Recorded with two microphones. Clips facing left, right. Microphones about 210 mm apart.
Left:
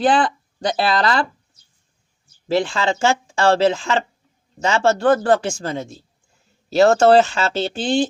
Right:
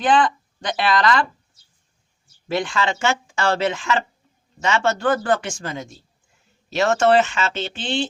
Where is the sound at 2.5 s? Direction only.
30° left (ahead or behind).